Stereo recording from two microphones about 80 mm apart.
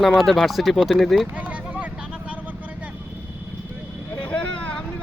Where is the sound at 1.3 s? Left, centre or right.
Centre.